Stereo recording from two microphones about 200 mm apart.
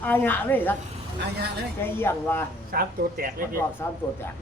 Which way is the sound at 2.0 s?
10° left (ahead or behind).